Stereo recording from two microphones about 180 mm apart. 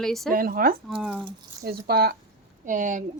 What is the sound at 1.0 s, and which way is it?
Speech, centre (ahead or behind).